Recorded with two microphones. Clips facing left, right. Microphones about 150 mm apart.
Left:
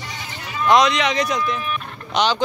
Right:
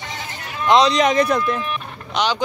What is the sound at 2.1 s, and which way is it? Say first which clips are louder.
Speech: left 1 dB; 10° right (ahead or behind).